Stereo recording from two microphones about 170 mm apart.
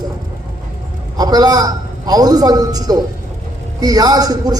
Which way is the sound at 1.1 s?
25° right (ahead or behind).